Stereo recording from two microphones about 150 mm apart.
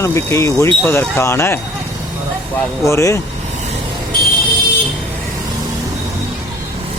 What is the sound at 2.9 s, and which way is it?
Speech, 20° left (ahead or behind).